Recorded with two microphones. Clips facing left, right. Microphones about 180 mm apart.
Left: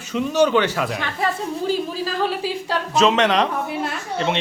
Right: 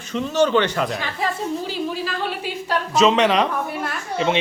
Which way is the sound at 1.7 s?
40° left (ahead or behind).